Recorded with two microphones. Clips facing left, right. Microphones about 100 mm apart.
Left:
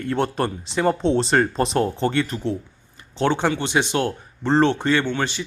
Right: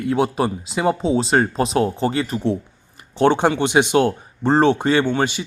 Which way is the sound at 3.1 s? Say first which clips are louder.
Right 5 dB; 15° right (ahead or behind).